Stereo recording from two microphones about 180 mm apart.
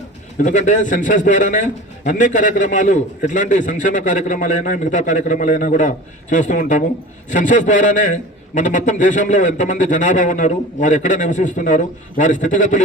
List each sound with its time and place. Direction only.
0.3 s a man's voice: 45° left (ahead or behind)